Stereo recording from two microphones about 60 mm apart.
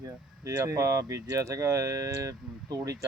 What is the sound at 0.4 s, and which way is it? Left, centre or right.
Speech, right.